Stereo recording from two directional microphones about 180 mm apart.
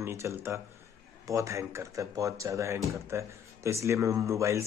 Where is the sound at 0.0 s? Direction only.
15° right (ahead or behind).